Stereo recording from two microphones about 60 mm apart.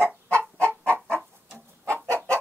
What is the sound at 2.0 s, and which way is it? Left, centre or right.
Chicken, right.